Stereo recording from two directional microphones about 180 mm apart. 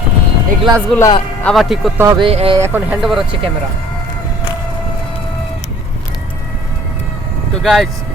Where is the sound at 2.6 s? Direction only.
10° right (ahead or behind).